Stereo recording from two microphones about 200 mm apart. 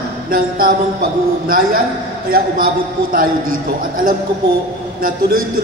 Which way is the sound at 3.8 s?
45° right (ahead or behind).